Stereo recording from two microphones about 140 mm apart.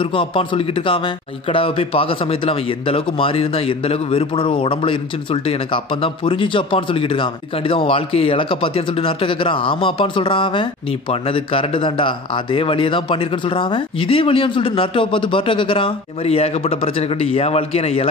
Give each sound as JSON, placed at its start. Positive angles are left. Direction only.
{"t": 0.0, "sound": "speech", "side_deg": 40}